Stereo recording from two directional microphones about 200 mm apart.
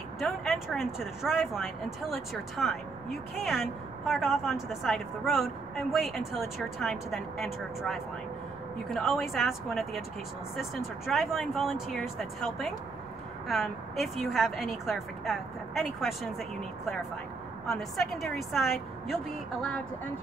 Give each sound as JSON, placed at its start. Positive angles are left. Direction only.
{"t": 0.2, "sound": "speech", "side_deg": 0}